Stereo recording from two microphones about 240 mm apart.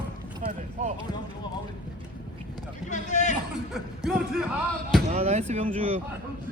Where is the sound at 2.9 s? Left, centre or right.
Left.